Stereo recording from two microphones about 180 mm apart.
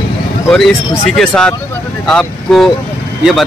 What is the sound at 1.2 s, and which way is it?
Speech, 5° left (ahead or behind).